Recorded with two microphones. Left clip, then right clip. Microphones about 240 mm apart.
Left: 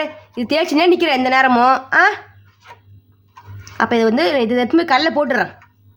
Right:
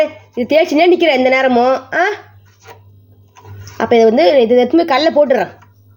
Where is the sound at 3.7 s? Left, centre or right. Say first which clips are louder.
Right 6 dB; left.